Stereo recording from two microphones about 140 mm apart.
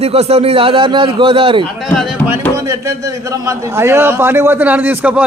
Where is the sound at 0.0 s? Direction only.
50° right (ahead or behind).